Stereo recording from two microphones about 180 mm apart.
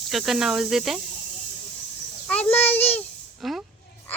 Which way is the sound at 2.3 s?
10° left (ahead or behind).